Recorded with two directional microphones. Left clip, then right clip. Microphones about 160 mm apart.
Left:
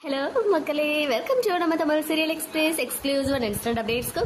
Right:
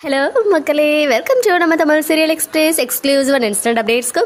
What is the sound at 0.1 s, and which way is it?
A woman's voice, 40° right (ahead or behind).